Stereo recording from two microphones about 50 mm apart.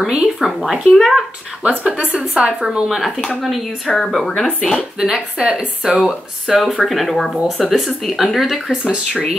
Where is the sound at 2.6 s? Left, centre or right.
Centre.